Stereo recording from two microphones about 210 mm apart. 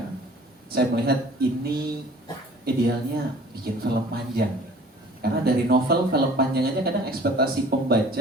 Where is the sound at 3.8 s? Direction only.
50° right (ahead or behind).